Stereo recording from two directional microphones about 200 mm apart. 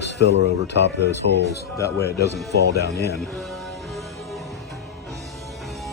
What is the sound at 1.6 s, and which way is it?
Speech, 15° left (ahead or behind).